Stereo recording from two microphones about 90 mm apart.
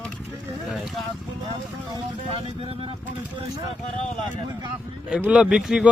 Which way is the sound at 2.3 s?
90° right.